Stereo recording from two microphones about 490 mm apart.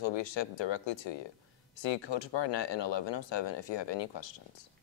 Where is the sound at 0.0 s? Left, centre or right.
Left.